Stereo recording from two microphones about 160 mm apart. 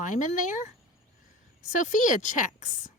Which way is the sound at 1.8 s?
55° left (ahead or behind).